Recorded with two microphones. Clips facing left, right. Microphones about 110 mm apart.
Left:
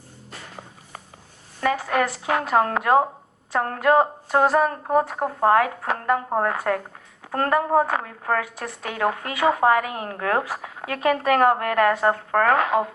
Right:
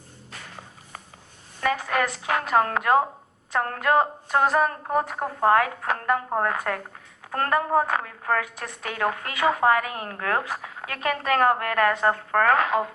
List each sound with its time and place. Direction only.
1.7 s a woman's voice: 20° left (ahead or behind)